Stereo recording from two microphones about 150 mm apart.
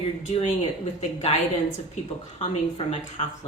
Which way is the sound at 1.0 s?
50° left (ahead or behind).